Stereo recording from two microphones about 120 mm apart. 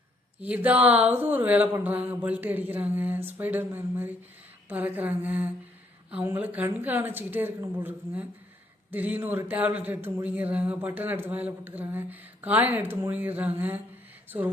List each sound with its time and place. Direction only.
0.4 s speech: 15° right (ahead or behind)